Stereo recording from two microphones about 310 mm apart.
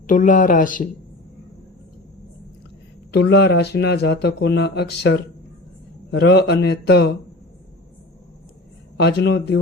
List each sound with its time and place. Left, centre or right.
0.1 s speech: left
3.1 s speech: left
9.0 s speech: left